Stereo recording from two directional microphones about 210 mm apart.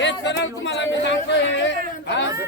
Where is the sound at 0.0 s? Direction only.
60° left (ahead or behind).